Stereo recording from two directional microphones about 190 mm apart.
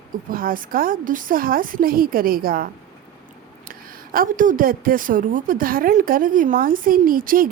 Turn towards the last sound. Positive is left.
turn(degrees=-45)  # may be behind; listen again after turning